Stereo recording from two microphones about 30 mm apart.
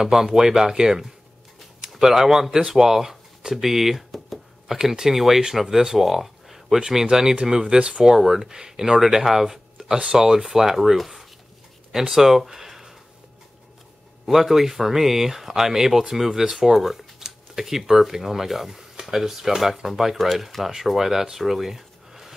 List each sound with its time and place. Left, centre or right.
0.0 s speech: centre
5.9 s a sound: centre
6.8 s speech: centre
7.7 s speech: right
8.2 s speech: centre
9.0 s speech: centre
10.4 s speech: centre
12.1 s speech: centre
14.2 s speech: centre